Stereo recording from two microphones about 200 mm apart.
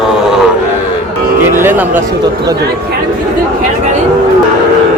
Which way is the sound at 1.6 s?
10° right (ahead or behind).